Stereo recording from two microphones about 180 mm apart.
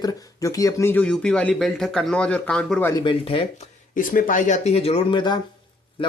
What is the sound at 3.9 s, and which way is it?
Speech, 50° left (ahead or behind).